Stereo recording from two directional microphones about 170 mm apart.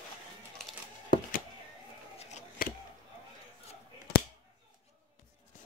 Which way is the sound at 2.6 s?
60° left (ahead or behind).